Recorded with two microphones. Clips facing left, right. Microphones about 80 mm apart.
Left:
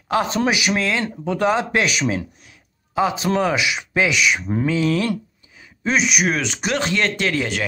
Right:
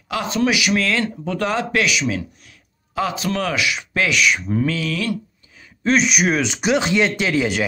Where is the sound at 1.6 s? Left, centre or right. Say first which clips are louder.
Even; left.